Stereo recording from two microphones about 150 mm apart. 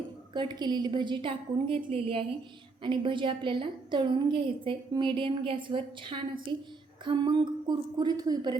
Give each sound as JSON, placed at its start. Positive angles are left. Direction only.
{"t": 0.3, "sound": "a woman's voice", "side_deg": -30}